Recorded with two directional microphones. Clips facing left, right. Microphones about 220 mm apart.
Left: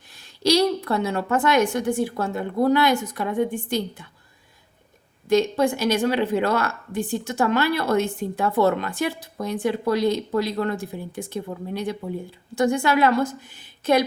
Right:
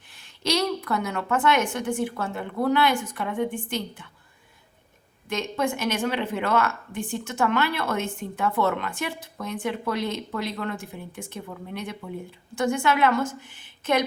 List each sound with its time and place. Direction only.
0.2 s speech: 35° left (ahead or behind)
5.3 s speech: 35° left (ahead or behind)